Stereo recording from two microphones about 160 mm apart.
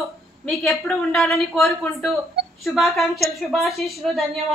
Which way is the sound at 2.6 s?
Centre (ahead or behind).